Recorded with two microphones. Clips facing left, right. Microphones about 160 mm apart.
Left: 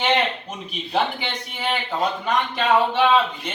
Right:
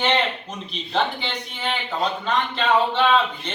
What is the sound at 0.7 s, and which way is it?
A man's voice, 10° left (ahead or behind).